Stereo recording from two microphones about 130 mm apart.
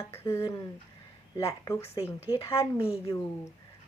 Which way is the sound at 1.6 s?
20° left (ahead or behind).